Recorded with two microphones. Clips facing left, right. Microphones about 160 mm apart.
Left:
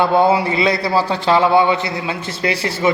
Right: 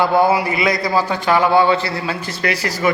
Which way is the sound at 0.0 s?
20° left (ahead or behind).